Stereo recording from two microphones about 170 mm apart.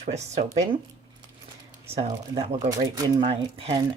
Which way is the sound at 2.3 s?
30° right (ahead or behind).